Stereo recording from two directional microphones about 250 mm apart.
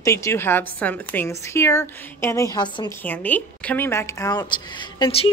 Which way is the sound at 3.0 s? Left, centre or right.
Centre.